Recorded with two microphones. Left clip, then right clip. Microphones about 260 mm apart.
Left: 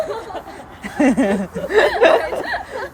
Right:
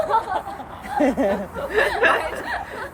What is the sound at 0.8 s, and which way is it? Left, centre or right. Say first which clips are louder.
Speech: left 3 dB; left.